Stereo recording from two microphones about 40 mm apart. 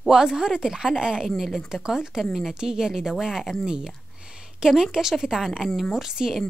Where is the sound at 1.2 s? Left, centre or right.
Centre.